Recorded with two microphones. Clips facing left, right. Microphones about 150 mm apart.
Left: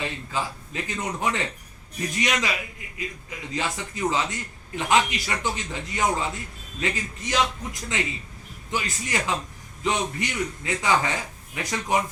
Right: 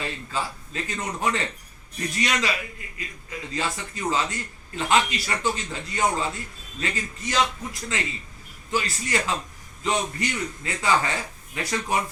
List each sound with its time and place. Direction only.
0.0 s a man's voice: 15° left (ahead or behind)